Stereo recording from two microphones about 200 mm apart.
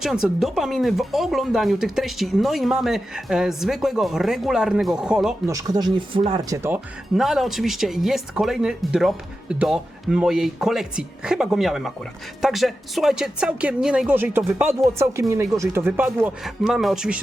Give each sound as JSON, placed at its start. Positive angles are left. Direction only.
{"t": 0.0, "sound": "speech", "side_deg": 0}
{"t": 5.5, "sound": "speech", "side_deg": -15}
{"t": 6.6, "sound": "speech", "side_deg": -10}